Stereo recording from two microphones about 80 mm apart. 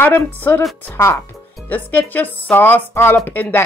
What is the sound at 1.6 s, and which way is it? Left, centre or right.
Speech, left.